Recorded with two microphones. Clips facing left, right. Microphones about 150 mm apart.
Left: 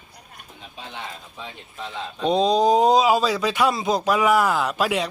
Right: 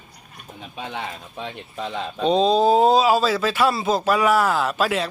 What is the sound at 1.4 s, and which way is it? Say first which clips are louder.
Speech: right 6 dB; 65° right (ahead or behind).